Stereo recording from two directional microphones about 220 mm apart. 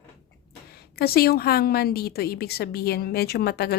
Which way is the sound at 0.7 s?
45° left (ahead or behind).